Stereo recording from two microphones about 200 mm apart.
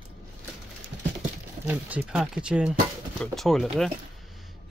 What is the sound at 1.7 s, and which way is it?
Speech, 5° right (ahead or behind).